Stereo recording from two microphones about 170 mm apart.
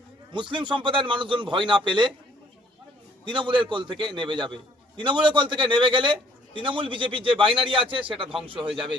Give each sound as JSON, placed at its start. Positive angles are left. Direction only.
{"t": 0.3, "sound": "a man's voice", "side_deg": -30}
{"t": 3.2, "sound": "a man's voice", "side_deg": -25}